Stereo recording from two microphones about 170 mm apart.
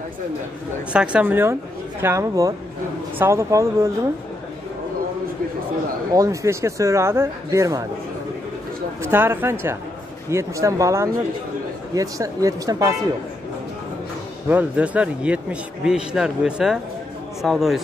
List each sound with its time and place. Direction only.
0.9 s a man's voice: 5° right (ahead or behind)
6.1 s a man's voice: 20° right (ahead or behind)
9.0 s a man's voice: 15° right (ahead or behind)
14.5 s a man's voice: 10° right (ahead or behind)